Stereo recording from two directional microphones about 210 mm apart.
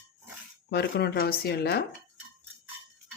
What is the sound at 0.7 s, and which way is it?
Speech, 50° left (ahead or behind).